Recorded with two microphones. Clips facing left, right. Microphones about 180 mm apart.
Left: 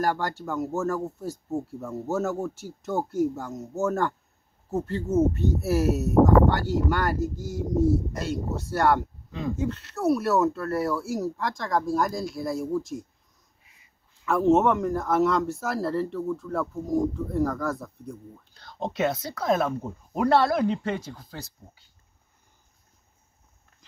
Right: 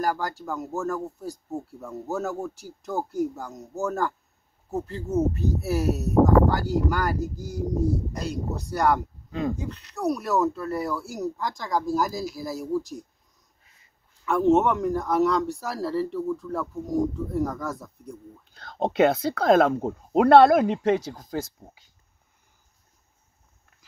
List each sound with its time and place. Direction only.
0.0 s speech: centre (ahead or behind)
14.2 s speech: centre (ahead or behind)
18.9 s speech: 60° right (ahead or behind); by 21.5 s 45° right (ahead or behind)